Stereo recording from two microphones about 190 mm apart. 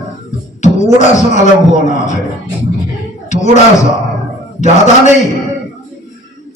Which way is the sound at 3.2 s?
40° left (ahead or behind).